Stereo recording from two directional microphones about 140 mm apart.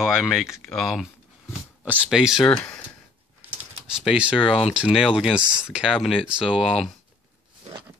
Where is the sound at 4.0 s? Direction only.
5° right (ahead or behind).